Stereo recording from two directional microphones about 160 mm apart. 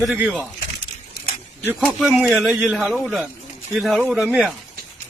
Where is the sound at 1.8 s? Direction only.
5° right (ahead or behind).